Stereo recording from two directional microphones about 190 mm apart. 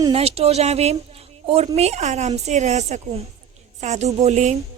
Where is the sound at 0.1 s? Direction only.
30° right (ahead or behind).